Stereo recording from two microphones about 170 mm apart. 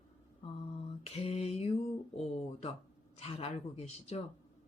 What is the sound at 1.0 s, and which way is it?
Lullaby, 40° left (ahead or behind).